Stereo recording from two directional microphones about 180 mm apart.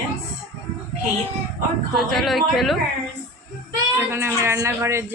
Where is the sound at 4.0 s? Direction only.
15° right (ahead or behind).